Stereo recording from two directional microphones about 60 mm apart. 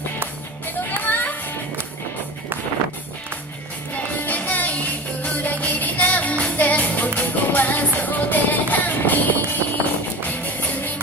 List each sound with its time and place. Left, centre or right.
1.0 s children playing: left
3.9 s music: left